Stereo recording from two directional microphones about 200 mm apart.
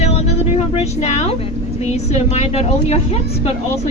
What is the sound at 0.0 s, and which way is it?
Vehicle, 30° left (ahead or behind).